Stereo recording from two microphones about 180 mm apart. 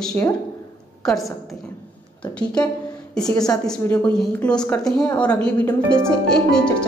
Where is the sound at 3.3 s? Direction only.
20° left (ahead or behind).